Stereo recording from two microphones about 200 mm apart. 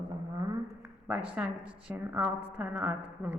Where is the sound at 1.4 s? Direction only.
5° right (ahead or behind).